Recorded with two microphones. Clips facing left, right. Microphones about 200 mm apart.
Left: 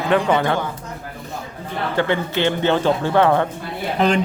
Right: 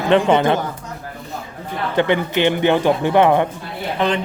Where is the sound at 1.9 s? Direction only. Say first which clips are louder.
Right 3 dB; 20° right (ahead or behind).